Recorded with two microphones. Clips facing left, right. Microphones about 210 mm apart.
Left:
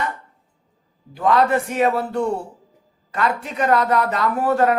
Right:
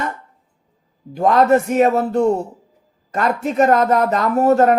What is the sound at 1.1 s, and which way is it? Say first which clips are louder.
A man's voice: right 4 dB; 45° right (ahead or behind).